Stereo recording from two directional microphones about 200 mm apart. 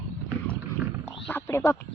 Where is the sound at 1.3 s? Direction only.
10° left (ahead or behind).